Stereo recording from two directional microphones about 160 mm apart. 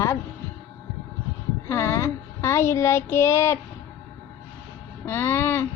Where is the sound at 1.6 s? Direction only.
20° left (ahead or behind).